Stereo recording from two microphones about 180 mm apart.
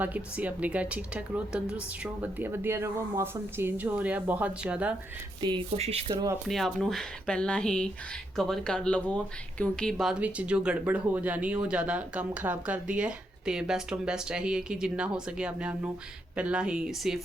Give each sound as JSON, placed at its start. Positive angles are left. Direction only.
{"t": 0.0, "sound": "speech", "side_deg": -10}
{"t": 5.4, "sound": "speech", "side_deg": -30}
{"t": 6.5, "sound": "speech", "side_deg": 0}